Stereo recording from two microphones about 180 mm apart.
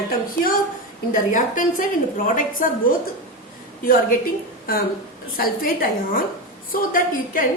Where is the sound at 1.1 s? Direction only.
45° left (ahead or behind).